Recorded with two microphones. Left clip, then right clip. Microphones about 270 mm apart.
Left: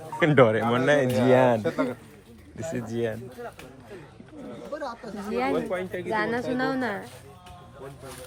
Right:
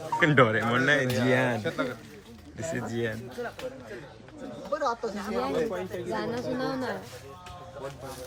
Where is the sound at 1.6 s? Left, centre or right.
Left.